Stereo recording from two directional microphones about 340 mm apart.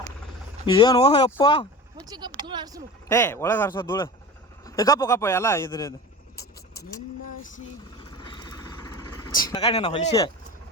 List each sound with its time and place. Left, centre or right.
0.6 s speech: centre
2.0 s speech: centre
3.1 s speech: centre
8.1 s vehicle: centre
9.5 s speech: centre